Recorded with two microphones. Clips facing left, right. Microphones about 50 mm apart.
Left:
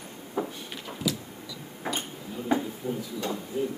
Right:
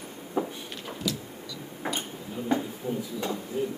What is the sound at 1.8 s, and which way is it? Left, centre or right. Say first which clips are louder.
Tick-tock: even; centre.